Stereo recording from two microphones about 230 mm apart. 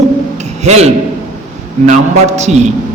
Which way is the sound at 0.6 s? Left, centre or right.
Right.